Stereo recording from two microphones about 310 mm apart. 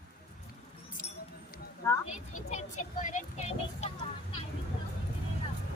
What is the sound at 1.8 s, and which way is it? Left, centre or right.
Speech, centre.